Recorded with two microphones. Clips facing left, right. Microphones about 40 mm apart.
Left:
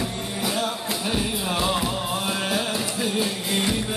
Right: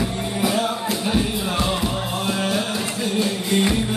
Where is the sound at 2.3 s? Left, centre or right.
Centre.